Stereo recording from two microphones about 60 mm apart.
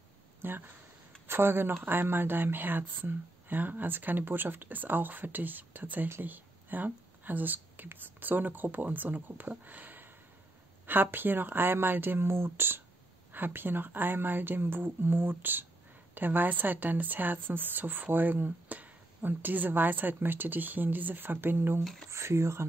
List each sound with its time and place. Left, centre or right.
0.4 s speech: right
22.1 s speech: right